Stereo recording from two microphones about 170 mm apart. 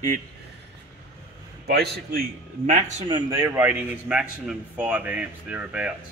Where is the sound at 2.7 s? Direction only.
45° right (ahead or behind).